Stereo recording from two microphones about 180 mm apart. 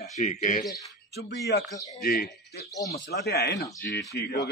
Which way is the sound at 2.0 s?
55° left (ahead or behind).